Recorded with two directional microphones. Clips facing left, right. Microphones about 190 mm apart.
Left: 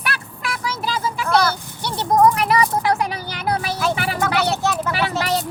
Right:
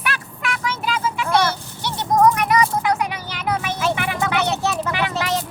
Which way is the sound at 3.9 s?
35° left (ahead or behind).